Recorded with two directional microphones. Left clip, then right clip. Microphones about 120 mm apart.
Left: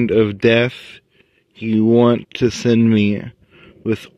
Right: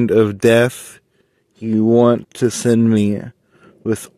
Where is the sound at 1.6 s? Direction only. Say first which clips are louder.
Right 1 dB; 20° left (ahead or behind).